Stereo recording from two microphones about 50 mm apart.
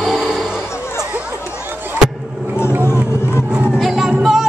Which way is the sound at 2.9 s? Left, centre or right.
Left.